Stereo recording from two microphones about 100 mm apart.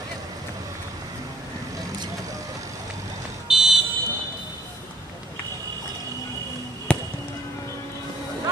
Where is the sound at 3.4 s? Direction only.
5° right (ahead or behind).